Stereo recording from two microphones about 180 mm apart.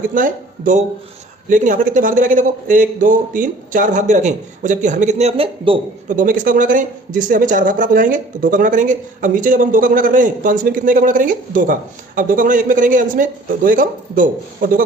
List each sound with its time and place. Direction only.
0.1 s speech: 45° right (ahead or behind); by 5.8 s 30° right (ahead or behind)
6.1 s speech: 45° right (ahead or behind)